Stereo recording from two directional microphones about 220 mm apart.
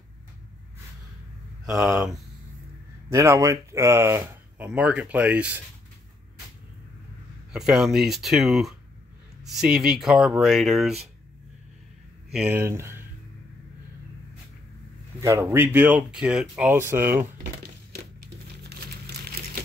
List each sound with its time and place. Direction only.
1.8 s speech: centre (ahead or behind)
3.1 s speech: 15° right (ahead or behind)
7.5 s speech: centre (ahead or behind)
12.3 s speech: 5° right (ahead or behind)
15.1 s speech: 15° right (ahead or behind)
17.9 s crumpling: 45° right (ahead or behind)